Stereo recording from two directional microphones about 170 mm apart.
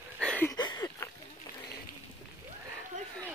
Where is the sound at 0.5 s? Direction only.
25° left (ahead or behind).